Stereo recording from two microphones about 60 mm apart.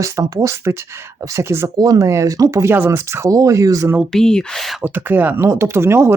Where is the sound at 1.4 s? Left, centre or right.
Right.